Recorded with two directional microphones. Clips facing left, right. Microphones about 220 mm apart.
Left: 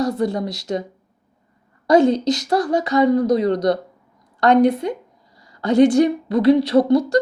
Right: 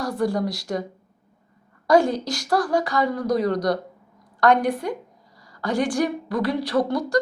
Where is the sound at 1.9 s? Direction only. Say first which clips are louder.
Left 4 dB; 20° left (ahead or behind).